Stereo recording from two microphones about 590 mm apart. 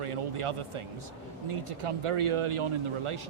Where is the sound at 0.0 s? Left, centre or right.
Right.